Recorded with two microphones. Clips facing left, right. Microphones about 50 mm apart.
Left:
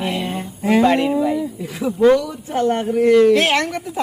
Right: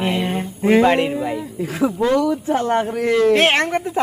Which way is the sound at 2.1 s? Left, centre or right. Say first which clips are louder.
Right 5 dB; right.